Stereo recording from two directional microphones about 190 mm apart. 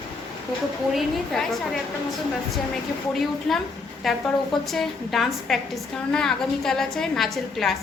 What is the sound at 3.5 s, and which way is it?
A woman's voice, centre (ahead or behind).